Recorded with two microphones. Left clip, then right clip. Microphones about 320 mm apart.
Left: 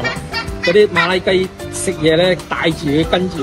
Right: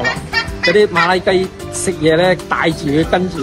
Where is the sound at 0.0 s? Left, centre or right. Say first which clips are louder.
Right 4 dB; centre.